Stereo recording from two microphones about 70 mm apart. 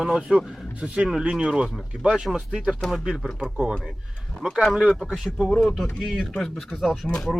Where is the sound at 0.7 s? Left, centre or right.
Centre.